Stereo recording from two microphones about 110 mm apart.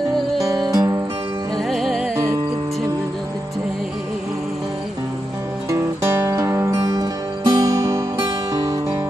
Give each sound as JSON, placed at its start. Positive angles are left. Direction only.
{"t": 0.4, "sound": "music", "side_deg": -35}
{"t": 1.7, "sound": "music", "side_deg": 0}
{"t": 5.7, "sound": "music", "side_deg": -25}